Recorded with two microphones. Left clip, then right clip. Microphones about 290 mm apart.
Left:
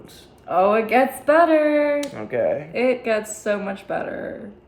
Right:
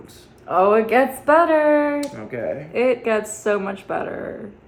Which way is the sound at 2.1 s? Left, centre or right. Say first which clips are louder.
Left 5 dB; centre.